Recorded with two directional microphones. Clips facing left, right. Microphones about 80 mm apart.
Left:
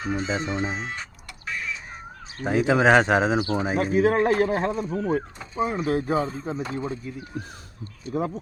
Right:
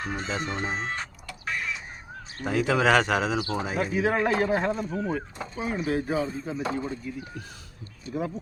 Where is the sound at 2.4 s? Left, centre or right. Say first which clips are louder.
Left 4 dB; left.